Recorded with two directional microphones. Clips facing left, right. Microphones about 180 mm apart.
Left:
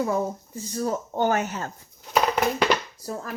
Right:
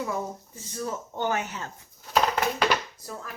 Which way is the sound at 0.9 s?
40° left (ahead or behind).